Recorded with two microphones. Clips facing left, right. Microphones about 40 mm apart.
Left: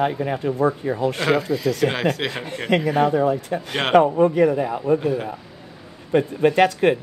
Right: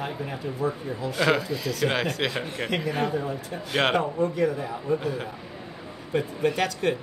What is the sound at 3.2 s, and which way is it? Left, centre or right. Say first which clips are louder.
Speech: left 10 dB; left.